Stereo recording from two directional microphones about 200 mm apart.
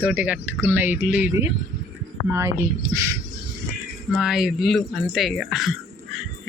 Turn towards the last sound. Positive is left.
turn(degrees=0)  # may be behind; listen again after turning